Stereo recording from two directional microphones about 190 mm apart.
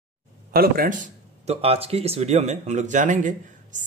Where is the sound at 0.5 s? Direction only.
50° right (ahead or behind).